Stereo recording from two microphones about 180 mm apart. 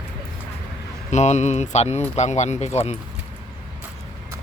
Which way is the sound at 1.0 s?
40° left (ahead or behind).